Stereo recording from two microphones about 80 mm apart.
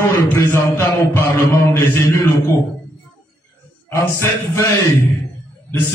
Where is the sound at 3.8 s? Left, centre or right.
Left.